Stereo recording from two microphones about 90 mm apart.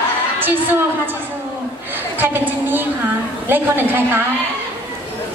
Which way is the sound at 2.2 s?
20° right (ahead or behind).